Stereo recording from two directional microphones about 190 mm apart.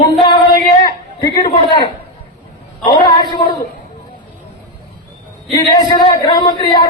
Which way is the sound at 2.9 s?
25° left (ahead or behind).